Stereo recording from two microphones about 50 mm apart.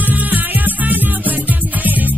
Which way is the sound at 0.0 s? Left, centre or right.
Right.